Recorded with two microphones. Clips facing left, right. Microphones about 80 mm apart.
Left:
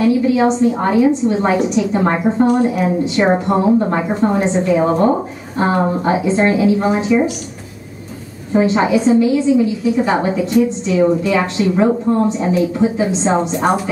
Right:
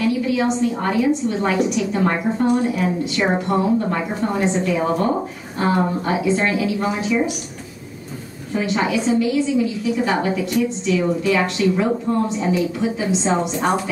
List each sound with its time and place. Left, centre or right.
0.0 s a woman's voice: left
8.5 s a woman's voice: left